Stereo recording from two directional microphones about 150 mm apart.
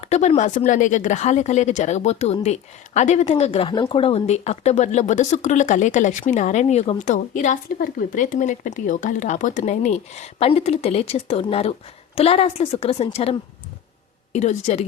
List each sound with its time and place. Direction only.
0.0 s a woman's voice: 45° left (ahead or behind)
14.3 s speech: 45° left (ahead or behind)